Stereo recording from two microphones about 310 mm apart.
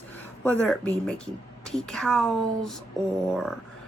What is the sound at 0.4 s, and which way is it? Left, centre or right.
Speech, centre.